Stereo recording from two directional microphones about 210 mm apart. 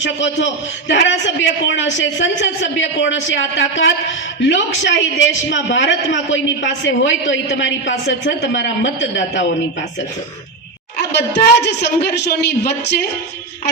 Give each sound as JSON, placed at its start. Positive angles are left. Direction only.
{"t": 0.0, "sound": "a man's voice", "side_deg": 60}
{"t": 10.9, "sound": "a woman's voice", "side_deg": 50}